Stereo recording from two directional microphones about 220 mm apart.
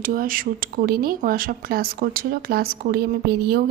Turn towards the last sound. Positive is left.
turn(degrees=-45)  # may be behind; listen again after turning